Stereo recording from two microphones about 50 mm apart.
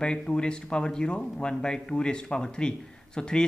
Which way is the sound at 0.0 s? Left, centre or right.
Centre.